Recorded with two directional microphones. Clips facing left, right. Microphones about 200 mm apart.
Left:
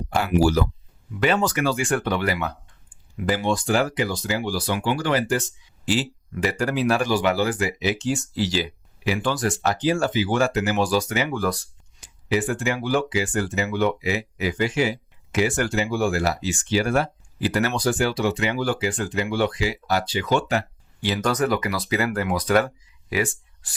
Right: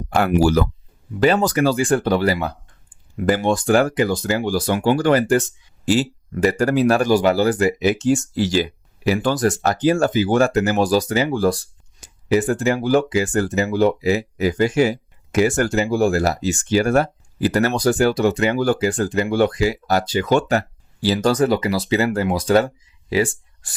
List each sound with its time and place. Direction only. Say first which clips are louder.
0.1 s speech: right 4 dB; 55° right (ahead or behind)
1.2 s speech: right 5 dB; 35° right (ahead or behind)
3.2 s speech: right 5 dB; 50° right (ahead or behind); by 11.6 s 30° right (ahead or behind)
11.9 s speech: right 6 dB; 45° right (ahead or behind)